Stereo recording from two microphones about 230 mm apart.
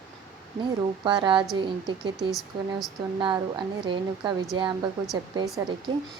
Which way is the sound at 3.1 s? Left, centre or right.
Centre.